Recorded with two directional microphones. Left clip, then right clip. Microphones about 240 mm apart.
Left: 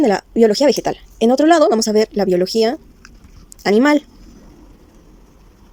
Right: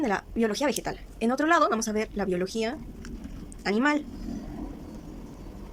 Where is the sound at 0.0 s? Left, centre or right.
Left.